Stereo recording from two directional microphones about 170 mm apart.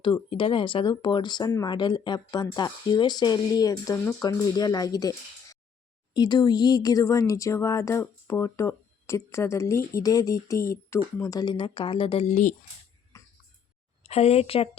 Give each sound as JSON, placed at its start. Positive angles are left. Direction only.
{"t": 0.0, "sound": "speech", "side_deg": 30}
{"t": 13.1, "sound": "a sound", "side_deg": 15}
{"t": 14.0, "sound": "speech", "side_deg": 35}